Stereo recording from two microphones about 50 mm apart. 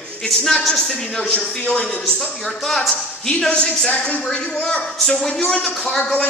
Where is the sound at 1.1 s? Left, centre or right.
Left.